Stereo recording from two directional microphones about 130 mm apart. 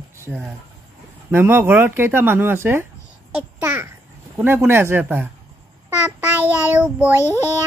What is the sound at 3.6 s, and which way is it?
Babbling, 15° right (ahead or behind).